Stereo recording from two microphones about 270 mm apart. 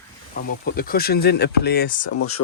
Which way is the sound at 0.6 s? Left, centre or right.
Left.